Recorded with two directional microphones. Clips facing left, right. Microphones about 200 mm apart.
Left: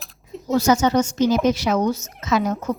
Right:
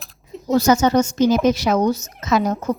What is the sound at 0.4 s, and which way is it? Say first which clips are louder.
A woman's voice: right 2 dB; 40° right (ahead or behind).